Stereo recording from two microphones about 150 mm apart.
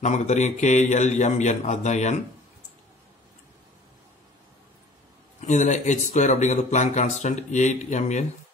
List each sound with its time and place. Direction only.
0.0 s speech: 50° left (ahead or behind)
5.5 s speech: 50° left (ahead or behind)